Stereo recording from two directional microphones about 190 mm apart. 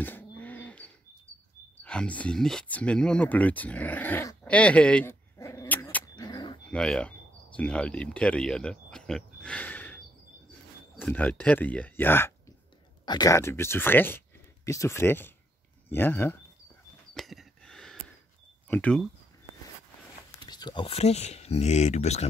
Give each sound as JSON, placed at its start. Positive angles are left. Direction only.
{"t": 0.0, "sound": "a sound", "side_deg": 10}
{"t": 1.8, "sound": "speech", "side_deg": 5}
{"t": 6.1, "sound": "a sound", "side_deg": 20}
{"t": 6.7, "sound": "speech", "side_deg": 5}
{"t": 11.0, "sound": "speech", "side_deg": 5}
{"t": 13.0, "sound": "speech", "side_deg": 20}
{"t": 17.1, "sound": "a sound", "side_deg": 0}
{"t": 18.7, "sound": "speech", "side_deg": 5}
{"t": 20.2, "sound": "speech", "side_deg": 20}